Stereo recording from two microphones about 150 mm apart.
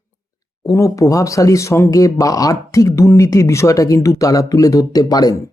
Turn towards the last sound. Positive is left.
turn(degrees=25)  # may be behind; listen again after turning